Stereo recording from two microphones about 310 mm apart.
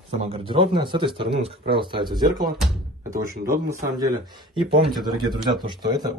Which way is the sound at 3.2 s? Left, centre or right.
Right.